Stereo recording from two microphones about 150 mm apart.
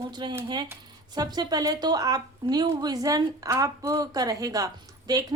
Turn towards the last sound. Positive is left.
turn(degrees=-25)  # may be behind; listen again after turning